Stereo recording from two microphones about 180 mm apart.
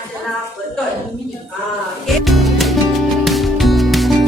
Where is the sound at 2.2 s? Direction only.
Centre (ahead or behind).